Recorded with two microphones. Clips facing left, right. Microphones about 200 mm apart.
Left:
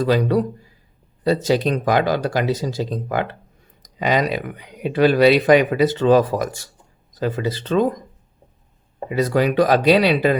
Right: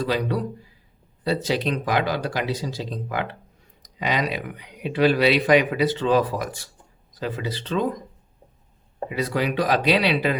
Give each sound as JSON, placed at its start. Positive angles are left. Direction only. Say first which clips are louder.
{"t": 0.0, "sound": "speech", "louder": "left 6 dB", "side_deg": 45}
{"t": 9.0, "sound": "speech", "louder": "left 6 dB", "side_deg": 45}